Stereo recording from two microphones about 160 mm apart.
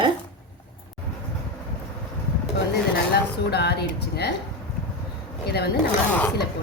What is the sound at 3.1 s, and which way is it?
Speech, 90° left.